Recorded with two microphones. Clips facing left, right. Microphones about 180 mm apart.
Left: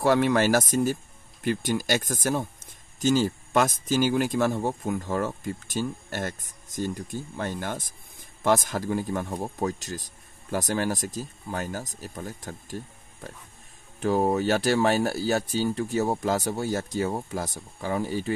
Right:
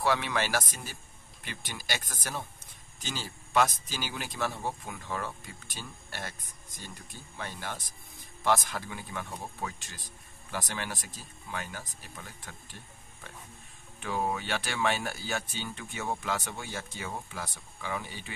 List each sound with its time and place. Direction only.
0.0 s speech: 45° left (ahead or behind)